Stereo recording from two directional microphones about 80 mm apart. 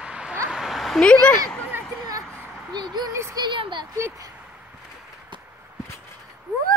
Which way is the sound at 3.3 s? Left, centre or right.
Right.